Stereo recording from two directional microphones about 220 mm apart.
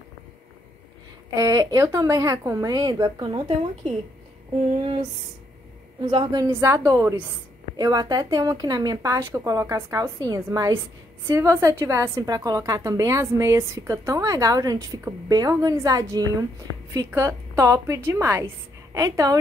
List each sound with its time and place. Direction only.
1.3 s a woman's voice: 15° right (ahead or behind)
6.0 s a woman's voice: 20° right (ahead or behind)